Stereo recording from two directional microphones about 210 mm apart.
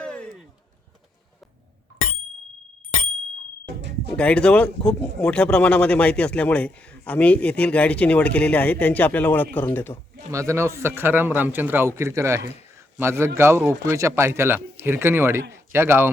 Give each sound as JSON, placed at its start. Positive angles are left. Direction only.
{"t": 0.0, "sound": "a sound", "side_deg": 5}
{"t": 3.8, "sound": "speech", "side_deg": -55}
{"t": 4.2, "sound": "speech", "side_deg": 5}
{"t": 10.3, "sound": "a man's voice", "side_deg": -15}